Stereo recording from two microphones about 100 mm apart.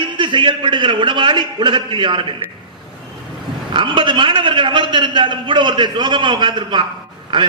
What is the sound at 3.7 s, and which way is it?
A man's voice, 55° right (ahead or behind).